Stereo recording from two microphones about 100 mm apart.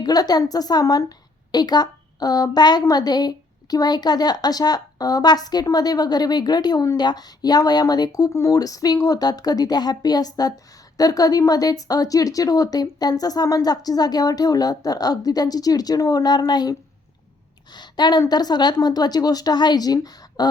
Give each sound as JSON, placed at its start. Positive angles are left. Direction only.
{"t": 0.0, "sound": "a woman's voice", "side_deg": 40}
{"t": 17.7, "sound": "a woman's voice", "side_deg": 45}